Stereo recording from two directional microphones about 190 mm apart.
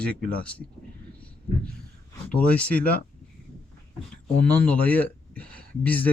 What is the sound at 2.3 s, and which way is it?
Speech, 5° left (ahead or behind).